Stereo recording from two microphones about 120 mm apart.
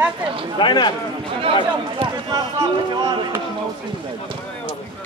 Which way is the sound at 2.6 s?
35° right (ahead or behind).